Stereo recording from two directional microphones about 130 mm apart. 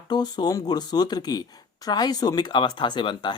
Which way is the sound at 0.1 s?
35° left (ahead or behind).